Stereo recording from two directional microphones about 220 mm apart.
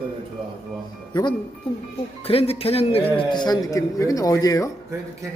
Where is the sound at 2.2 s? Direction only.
25° left (ahead or behind).